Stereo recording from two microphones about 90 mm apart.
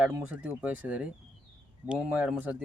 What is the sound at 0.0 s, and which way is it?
Speech, 15° right (ahead or behind).